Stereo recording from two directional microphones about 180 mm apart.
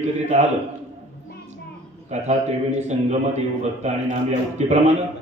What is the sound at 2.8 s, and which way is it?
A man's voice, 40° right (ahead or behind).